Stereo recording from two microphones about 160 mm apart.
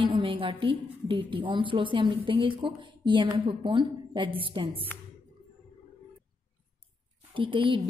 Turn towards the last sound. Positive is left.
turn(degrees=-30)  # may be behind; listen again after turning